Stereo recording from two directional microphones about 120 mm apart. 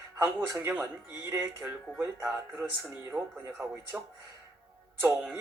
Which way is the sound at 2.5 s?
5° right (ahead or behind).